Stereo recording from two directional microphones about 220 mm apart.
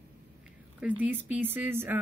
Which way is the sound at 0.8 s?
5° right (ahead or behind).